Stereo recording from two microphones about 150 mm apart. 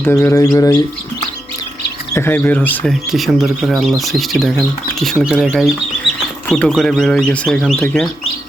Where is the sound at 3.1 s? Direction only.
Centre (ahead or behind).